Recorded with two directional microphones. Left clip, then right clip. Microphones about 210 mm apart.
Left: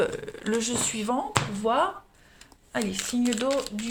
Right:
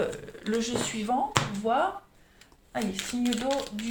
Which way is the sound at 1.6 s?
50° left (ahead or behind).